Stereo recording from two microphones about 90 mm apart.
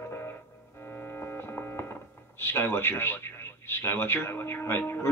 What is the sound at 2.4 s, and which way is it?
Speech, 25° left (ahead or behind).